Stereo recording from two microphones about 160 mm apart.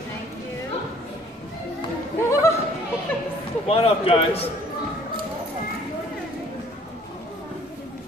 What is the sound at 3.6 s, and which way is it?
Speech, 35° left (ahead or behind).